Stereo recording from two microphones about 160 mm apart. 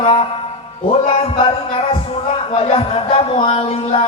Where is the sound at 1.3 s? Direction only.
35° left (ahead or behind).